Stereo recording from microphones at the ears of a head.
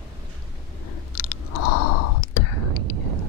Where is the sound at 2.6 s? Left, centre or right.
Right.